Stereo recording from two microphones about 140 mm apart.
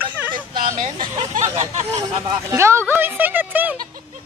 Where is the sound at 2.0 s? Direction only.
25° right (ahead or behind).